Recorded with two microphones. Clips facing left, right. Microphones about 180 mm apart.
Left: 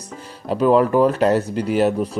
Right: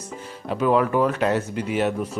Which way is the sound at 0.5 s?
35° left (ahead or behind).